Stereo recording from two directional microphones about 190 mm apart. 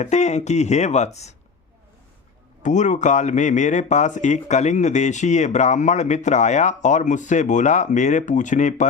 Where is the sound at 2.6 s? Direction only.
40° left (ahead or behind).